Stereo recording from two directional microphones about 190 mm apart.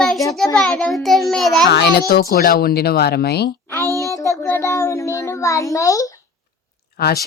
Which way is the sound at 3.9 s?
15° right (ahead or behind).